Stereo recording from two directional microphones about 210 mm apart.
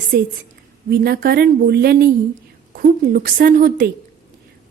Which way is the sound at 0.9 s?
45° right (ahead or behind).